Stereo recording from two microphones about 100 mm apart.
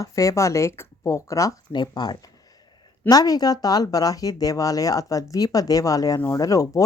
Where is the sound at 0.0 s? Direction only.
30° left (ahead or behind).